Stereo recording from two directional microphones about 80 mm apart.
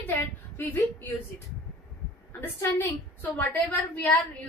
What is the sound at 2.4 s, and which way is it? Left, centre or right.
A woman's voice, left.